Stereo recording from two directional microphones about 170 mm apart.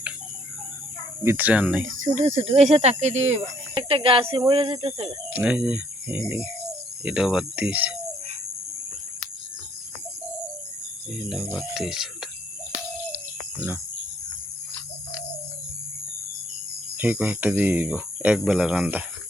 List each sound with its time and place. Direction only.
1.2 s speech: 10° right (ahead or behind)
2.1 s speech: 40° right (ahead or behind)
3.8 s speech: 30° right (ahead or behind)
5.3 s speech: 10° right (ahead or behind)
11.1 s speech: 5° right (ahead or behind)
17.0 s speech: 10° right (ahead or behind)